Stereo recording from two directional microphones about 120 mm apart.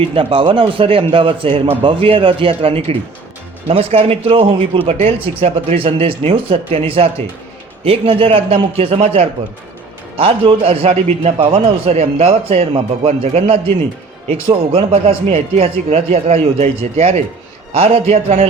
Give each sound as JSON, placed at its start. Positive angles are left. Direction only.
{"t": 0.1, "sound": "a man's voice", "side_deg": -45}
{"t": 17.7, "sound": "a man's voice", "side_deg": -50}
{"t": 18.1, "sound": "speech", "side_deg": -65}